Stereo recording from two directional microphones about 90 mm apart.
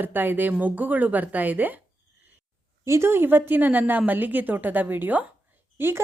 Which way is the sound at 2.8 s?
30° right (ahead or behind).